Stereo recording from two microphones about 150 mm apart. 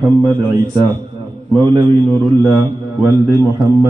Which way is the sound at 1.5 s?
30° right (ahead or behind).